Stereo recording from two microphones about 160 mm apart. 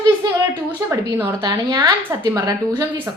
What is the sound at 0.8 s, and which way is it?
A woman's voice, 10° right (ahead or behind).